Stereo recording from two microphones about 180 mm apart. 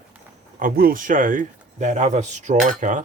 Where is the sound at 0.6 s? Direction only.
55° right (ahead or behind).